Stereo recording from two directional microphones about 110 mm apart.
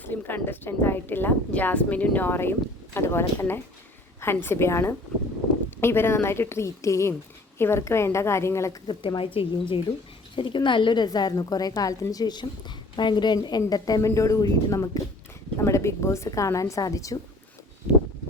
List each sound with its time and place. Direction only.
0.0 s a woman's voice: 15° left (ahead or behind)
8.9 s a woman's voice: 50° left (ahead or behind); by 17.2 s 30° left (ahead or behind)